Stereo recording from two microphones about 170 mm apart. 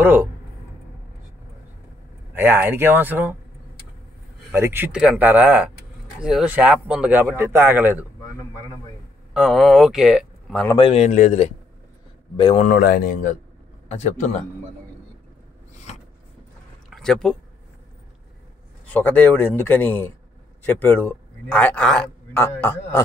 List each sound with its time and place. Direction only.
0.0 s a man's voice: 10° right (ahead or behind)
2.3 s a man's voice: 15° right (ahead or behind)
4.5 s a man's voice: 15° right (ahead or behind)
9.3 s speech: centre (ahead or behind)
10.8 s speech: 40° left (ahead or behind)
12.4 s speech: 30° left (ahead or behind)
12.6 s speech: 65° left (ahead or behind); by 14.4 s 40° left (ahead or behind)
16.9 s speech: 5° left (ahead or behind)
18.9 s a man's voice: 10° left (ahead or behind)